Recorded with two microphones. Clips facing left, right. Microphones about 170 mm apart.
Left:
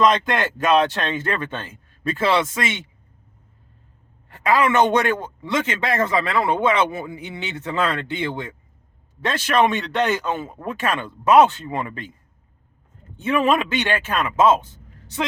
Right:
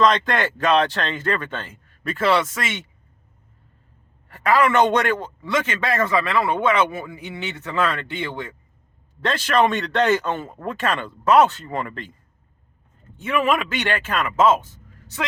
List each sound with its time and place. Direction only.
0.0 s a man's voice: 10° left (ahead or behind)
4.4 s a man's voice: 20° left (ahead or behind)
9.7 s speech: centre (ahead or behind); by 11.9 s 15° left (ahead or behind)
13.2 s a man's voice: 25° left (ahead or behind)